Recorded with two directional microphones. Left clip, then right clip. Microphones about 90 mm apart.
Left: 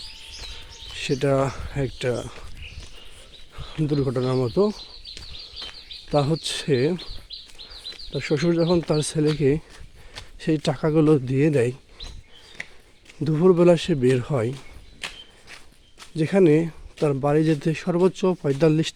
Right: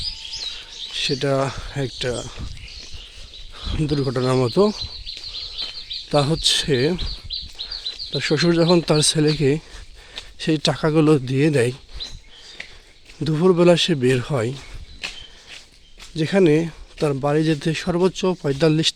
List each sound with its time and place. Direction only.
0.9 s speech: 5° left (ahead or behind)
3.5 s a sound: 5° right (ahead or behind)
3.8 s speech: 5° left (ahead or behind)
4.0 s speech: 15° right (ahead or behind)
6.1 s speech: 5° right (ahead or behind)
7.7 s insect: 10° right (ahead or behind)
8.5 s speech: 20° right (ahead or behind); by 11.8 s 5° right (ahead or behind)
13.2 s speech: centre (ahead or behind)
16.1 s speech: 5° left (ahead or behind)
18.1 s speech: 15° left (ahead or behind)
18.7 s speech: 5° left (ahead or behind)